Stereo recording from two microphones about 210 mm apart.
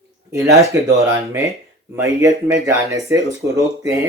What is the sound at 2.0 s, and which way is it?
Speech, 15° right (ahead or behind).